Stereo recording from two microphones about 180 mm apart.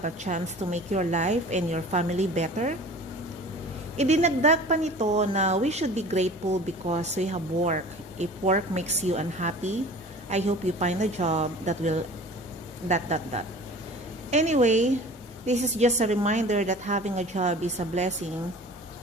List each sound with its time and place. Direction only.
0.0 s a woman's voice: 40° right (ahead or behind)
3.9 s a woman's voice: 40° right (ahead or behind)